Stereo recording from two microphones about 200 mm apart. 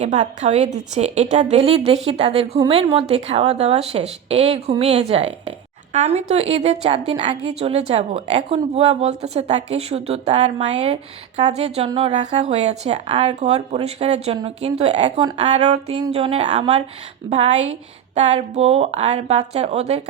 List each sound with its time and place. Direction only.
0.0 s a woman's voice: 35° right (ahead or behind)